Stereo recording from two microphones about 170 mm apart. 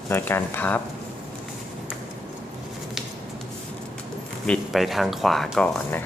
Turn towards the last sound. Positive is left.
turn(degrees=5)  # may be behind; listen again after turning